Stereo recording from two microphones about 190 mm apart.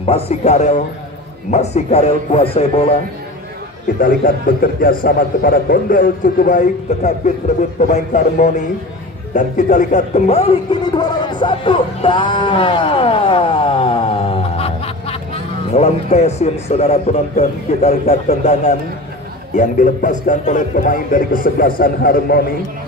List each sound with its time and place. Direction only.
0.0 s a man's voice: 35° left (ahead or behind)
4.0 s a man's voice: 45° left (ahead or behind)